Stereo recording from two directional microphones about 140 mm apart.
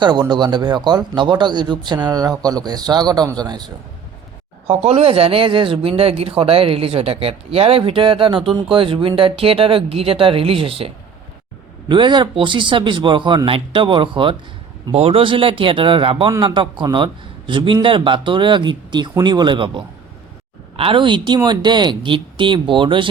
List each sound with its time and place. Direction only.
0.0 s speech: 30° right (ahead or behind)
4.6 s speech: 45° right (ahead or behind)